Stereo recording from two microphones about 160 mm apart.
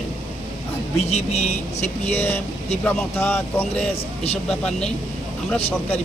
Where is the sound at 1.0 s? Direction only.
45° left (ahead or behind).